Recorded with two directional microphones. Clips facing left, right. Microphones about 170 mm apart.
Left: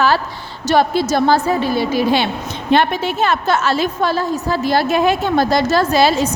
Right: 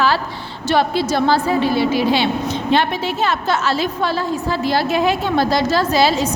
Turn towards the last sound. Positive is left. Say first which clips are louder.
# left 2 dB
turn(degrees=50)  # may be behind; listen again after turning